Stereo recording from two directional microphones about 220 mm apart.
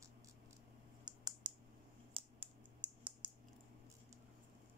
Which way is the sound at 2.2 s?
25° right (ahead or behind).